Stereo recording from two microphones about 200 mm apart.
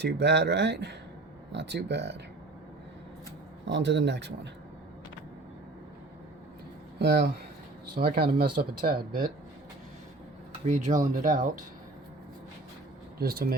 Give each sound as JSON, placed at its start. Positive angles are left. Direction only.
{"t": 0.0, "sound": "speech", "side_deg": -60}
{"t": 3.7, "sound": "speech", "side_deg": -60}
{"t": 7.0, "sound": "speech", "side_deg": -55}
{"t": 10.7, "sound": "speech", "side_deg": -35}
{"t": 13.1, "sound": "speech", "side_deg": -50}